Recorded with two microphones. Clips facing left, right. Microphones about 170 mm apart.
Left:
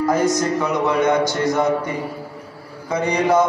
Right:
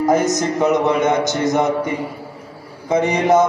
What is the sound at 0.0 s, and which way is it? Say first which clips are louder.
A man's voice: right 2 dB; 20° right (ahead or behind).